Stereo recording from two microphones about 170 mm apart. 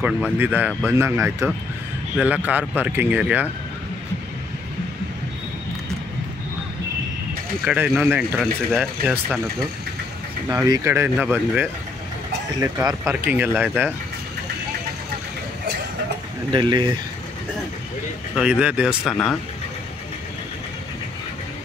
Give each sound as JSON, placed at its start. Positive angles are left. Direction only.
{"t": 0.0, "sound": "speech", "side_deg": -10}
{"t": 7.6, "sound": "speech", "side_deg": -10}
{"t": 10.5, "sound": "speech", "side_deg": -15}
{"t": 12.7, "sound": "speech", "side_deg": -15}
{"t": 16.5, "sound": "speech", "side_deg": -25}
{"t": 18.3, "sound": "speech", "side_deg": -5}